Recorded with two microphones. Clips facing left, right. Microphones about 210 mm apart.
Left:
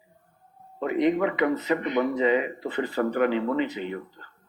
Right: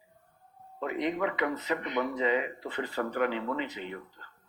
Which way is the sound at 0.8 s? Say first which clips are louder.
Left 7 dB; 70° left (ahead or behind).